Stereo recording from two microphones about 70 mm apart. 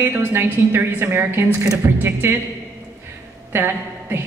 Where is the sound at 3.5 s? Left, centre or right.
Right.